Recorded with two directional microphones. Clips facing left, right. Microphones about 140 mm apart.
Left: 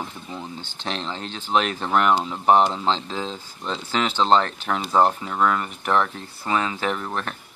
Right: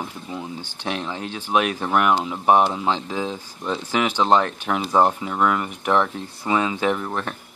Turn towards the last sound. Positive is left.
turn(degrees=-15)  # may be behind; listen again after turning